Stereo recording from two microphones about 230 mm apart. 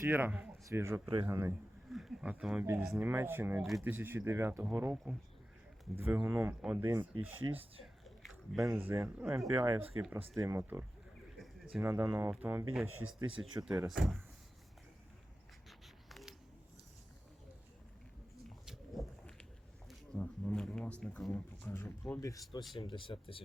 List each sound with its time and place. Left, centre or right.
0.0 s speech: centre
1.9 s speech: centre
7.4 s speech: right
8.0 s a sound: centre
8.5 s speech: centre
11.3 s bird: centre
11.8 s speech: centre
12.9 s speech: right
13.7 s speech: centre
16.0 s a sound: centre
18.4 s a sound: centre
19.9 s speech: centre; by 23.4 s left